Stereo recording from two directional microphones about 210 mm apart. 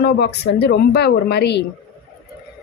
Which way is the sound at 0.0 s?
50° left (ahead or behind).